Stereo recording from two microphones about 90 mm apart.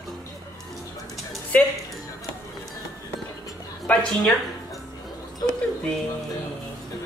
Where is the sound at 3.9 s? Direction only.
15° left (ahead or behind).